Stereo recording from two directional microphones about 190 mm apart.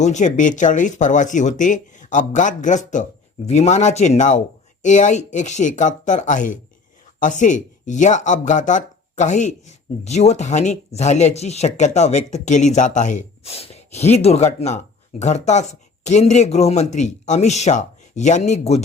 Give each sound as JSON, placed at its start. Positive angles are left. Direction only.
{"t": 0.0, "sound": "speech", "side_deg": 40}